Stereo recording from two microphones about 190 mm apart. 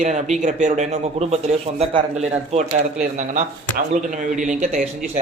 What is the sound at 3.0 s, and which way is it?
Speech, 40° right (ahead or behind).